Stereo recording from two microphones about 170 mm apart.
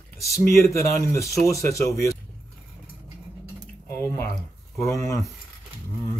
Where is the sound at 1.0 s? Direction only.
15° left (ahead or behind).